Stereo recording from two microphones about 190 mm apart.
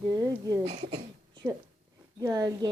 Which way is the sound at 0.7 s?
30° right (ahead or behind).